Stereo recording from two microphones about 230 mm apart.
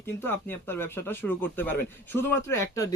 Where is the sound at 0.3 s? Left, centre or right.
Centre.